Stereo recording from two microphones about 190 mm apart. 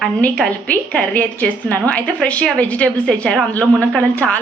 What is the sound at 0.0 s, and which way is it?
A woman's voice, 5° left (ahead or behind).